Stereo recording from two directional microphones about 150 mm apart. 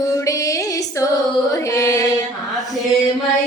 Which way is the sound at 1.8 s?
20° left (ahead or behind).